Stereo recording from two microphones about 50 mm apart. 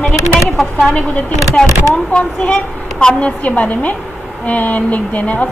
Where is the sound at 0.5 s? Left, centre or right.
Centre.